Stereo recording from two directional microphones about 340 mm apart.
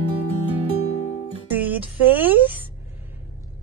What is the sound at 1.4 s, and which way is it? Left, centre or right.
Music, centre.